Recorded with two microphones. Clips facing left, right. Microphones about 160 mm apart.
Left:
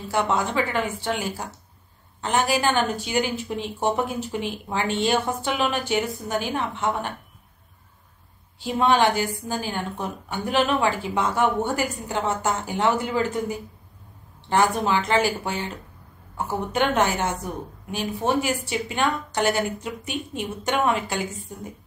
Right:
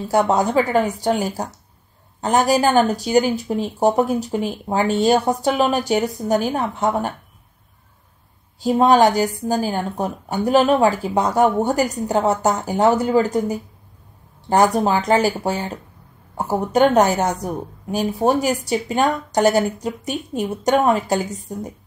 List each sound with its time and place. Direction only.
0.1 s a woman's voice: 40° right (ahead or behind)
8.5 s a woman's voice: 40° right (ahead or behind)